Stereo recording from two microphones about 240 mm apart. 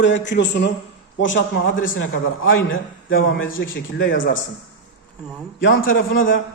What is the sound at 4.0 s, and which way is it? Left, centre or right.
Speech, left.